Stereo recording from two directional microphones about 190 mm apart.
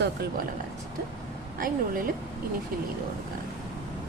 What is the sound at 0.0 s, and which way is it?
Speech, 55° right (ahead or behind).